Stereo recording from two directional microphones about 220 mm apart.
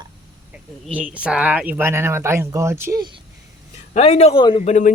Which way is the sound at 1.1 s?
5° right (ahead or behind).